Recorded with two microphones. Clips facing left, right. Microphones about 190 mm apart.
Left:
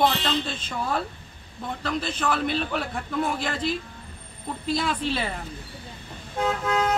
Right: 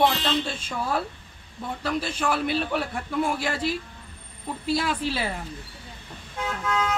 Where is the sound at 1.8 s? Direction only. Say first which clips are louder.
Right 1 dB; 10° right (ahead or behind).